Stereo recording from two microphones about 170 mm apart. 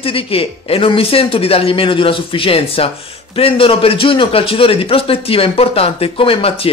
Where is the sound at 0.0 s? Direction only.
35° left (ahead or behind).